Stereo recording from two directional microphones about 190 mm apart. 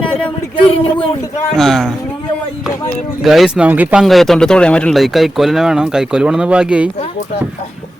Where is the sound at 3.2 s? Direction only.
Centre (ahead or behind).